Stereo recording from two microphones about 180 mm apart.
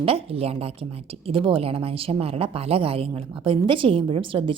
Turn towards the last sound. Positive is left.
turn(degrees=-30)  # may be behind; listen again after turning